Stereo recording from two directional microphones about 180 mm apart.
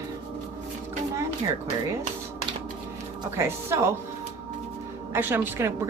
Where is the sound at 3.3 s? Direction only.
15° right (ahead or behind).